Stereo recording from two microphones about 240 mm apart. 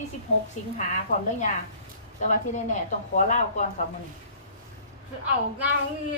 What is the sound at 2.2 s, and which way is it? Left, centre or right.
A woman's voice, left.